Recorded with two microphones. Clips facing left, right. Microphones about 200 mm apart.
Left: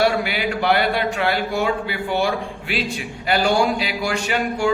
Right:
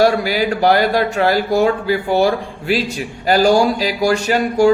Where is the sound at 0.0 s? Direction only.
40° right (ahead or behind).